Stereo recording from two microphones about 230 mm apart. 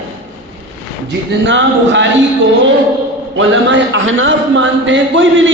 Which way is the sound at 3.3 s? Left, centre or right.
Right.